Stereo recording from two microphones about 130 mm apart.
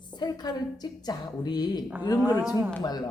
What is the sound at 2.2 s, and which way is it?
Speech, 15° right (ahead or behind).